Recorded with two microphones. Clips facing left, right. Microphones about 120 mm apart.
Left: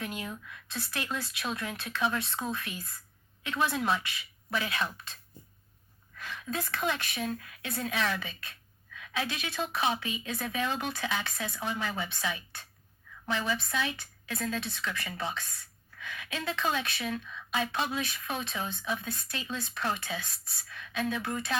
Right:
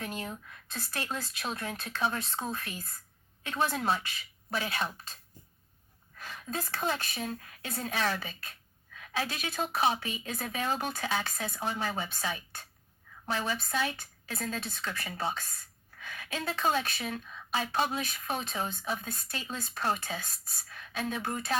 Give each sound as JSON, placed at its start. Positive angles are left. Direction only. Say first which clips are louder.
{"t": 0.0, "sound": "a woman's voice", "louder": "even", "side_deg": -40}
{"t": 6.1, "sound": "a woman's voice", "louder": "left 1 dB", "side_deg": -40}